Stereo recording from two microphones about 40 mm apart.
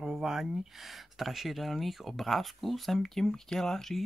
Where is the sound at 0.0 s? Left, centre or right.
Centre.